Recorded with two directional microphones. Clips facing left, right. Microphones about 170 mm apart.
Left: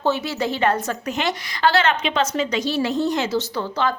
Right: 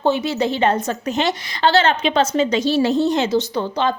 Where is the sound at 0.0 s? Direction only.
20° right (ahead or behind).